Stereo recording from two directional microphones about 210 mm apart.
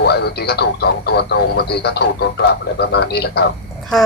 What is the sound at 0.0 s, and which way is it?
Speech, 50° left (ahead or behind).